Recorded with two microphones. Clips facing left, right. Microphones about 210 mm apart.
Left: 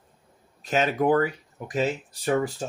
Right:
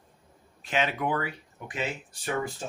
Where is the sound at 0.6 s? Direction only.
40° left (ahead or behind).